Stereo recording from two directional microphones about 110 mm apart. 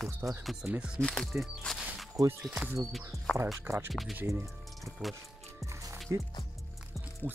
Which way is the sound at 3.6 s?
20° right (ahead or behind).